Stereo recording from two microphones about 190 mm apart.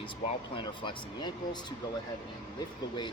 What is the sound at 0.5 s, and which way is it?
Speech, 25° left (ahead or behind).